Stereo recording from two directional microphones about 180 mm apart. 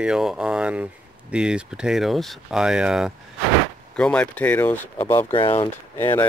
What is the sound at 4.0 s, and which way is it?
Speech, 5° left (ahead or behind).